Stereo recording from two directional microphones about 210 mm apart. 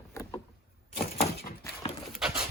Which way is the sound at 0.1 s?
15° left (ahead or behind).